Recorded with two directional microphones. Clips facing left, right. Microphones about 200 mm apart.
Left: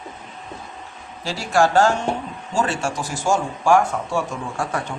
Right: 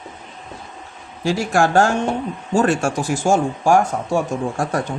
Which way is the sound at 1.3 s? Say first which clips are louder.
Right 2 dB; 50° right (ahead or behind).